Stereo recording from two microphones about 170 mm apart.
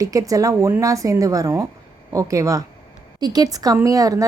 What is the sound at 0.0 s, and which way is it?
A woman's voice, 20° right (ahead or behind).